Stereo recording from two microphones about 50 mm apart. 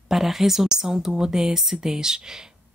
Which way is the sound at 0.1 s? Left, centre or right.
Centre.